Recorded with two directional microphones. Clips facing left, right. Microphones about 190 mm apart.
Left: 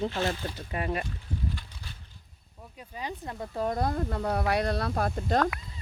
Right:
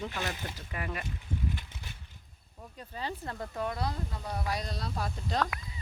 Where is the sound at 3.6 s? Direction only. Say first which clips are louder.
Left 7 dB; 45° left (ahead or behind).